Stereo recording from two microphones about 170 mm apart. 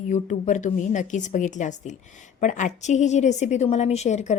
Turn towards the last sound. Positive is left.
turn(degrees=40)  # may be behind; listen again after turning